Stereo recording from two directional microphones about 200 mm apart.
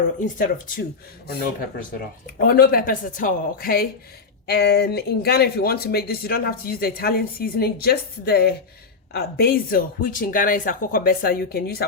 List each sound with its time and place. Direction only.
0.2 s speech: 45° left (ahead or behind)